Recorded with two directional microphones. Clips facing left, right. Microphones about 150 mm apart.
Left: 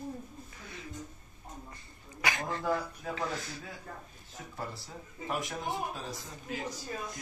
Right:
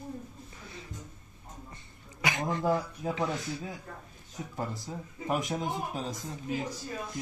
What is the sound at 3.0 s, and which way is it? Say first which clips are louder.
Speech: right 5 dB; 20° right (ahead or behind).